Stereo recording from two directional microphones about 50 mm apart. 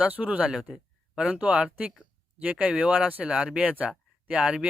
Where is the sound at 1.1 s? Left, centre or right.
Centre.